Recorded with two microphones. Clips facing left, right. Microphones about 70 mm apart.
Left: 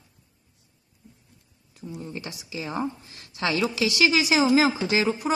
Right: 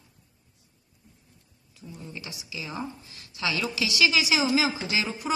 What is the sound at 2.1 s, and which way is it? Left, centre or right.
A woman's voice, left.